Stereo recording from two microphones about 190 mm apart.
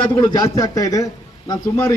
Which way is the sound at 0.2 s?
20° left (ahead or behind).